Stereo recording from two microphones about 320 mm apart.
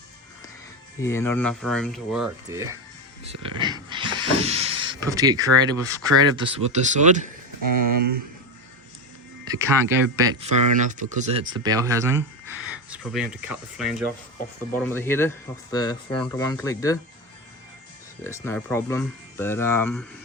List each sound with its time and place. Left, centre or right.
0.9 s speech: centre
3.2 s a sound: centre
5.0 s speech: centre
7.6 s speech: right
9.4 s speech: centre
10.5 s speech: right
10.8 s speech: right
11.3 s speech: centre
18.2 s speech: centre